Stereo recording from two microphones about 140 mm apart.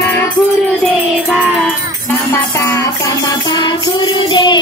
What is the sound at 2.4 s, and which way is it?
Music, 20° left (ahead or behind).